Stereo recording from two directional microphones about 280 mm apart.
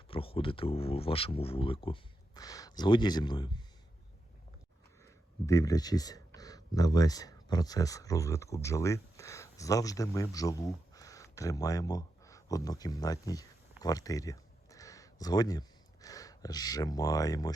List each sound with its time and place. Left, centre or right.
0.1 s speech: centre
5.0 s speech: centre
13.8 s a sound: centre